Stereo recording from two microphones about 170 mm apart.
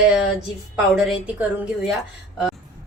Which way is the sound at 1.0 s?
5° right (ahead or behind).